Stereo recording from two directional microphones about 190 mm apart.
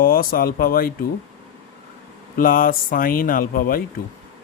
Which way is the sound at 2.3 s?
50° left (ahead or behind).